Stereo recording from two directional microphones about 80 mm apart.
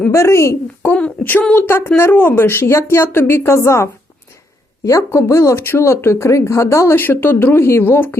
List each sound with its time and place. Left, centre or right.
0.1 s speech: left
1.2 s speech: left
4.9 s speech: left
6.9 s speech: left